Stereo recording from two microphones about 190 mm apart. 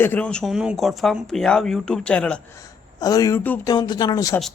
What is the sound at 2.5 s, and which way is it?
Speech, 20° left (ahead or behind).